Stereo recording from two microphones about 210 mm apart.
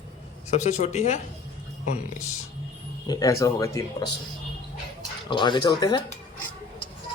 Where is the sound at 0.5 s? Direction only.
30° left (ahead or behind).